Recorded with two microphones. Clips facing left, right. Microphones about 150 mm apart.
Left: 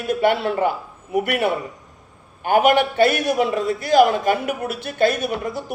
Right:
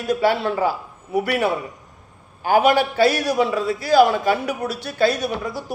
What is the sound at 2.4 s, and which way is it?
A man's voice, 50° left (ahead or behind).